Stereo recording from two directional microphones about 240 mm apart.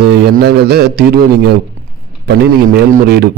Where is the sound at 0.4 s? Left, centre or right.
Right.